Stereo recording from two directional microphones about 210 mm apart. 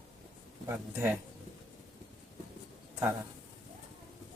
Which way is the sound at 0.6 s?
10° right (ahead or behind).